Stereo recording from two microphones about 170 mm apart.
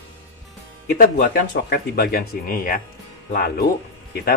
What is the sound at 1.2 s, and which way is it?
Speech, 65° left (ahead or behind).